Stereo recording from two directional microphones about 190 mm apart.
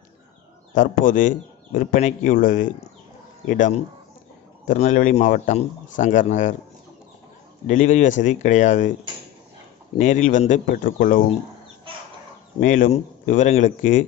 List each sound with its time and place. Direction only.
0.7 s speech: 45° left (ahead or behind)
7.6 s speech: 40° left (ahead or behind)
9.9 s speech: 40° left (ahead or behind)
12.5 s speech: 45° left (ahead or behind)